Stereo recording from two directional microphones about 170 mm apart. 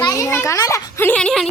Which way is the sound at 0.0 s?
20° left (ahead or behind).